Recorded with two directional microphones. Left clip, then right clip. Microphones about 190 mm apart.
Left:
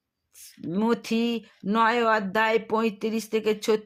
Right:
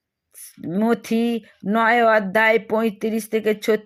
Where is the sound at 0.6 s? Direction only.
10° right (ahead or behind).